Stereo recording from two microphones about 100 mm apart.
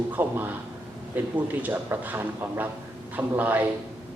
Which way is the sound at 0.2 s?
20° right (ahead or behind).